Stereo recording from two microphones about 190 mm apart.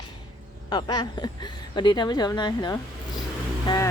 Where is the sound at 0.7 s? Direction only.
20° left (ahead or behind).